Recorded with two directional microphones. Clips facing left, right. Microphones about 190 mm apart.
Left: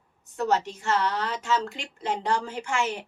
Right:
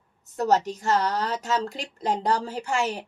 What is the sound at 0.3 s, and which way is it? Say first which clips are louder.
A woman's voice: right 3 dB; 40° right (ahead or behind).